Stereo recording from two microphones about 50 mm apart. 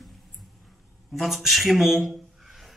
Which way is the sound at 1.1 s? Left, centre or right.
Centre.